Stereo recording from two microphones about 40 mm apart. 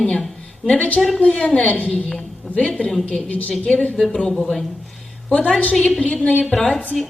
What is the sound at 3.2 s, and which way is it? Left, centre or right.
Speech, left.